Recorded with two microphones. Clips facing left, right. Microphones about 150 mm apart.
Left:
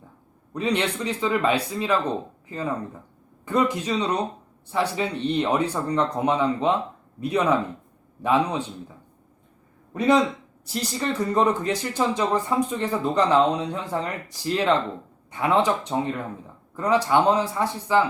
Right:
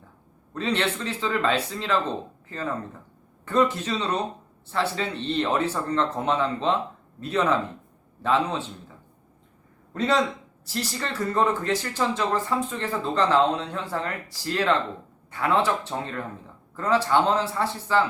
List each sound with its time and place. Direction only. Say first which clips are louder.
0.5 s speech: left 2 dB; 15° left (ahead or behind)
9.9 s speech: left 4 dB; 15° left (ahead or behind)